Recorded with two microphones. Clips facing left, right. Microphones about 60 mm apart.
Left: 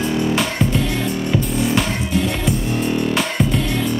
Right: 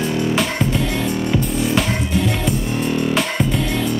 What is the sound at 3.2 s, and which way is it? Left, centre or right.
Music, centre.